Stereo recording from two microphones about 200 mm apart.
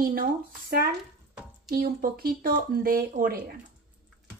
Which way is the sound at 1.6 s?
50° right (ahead or behind).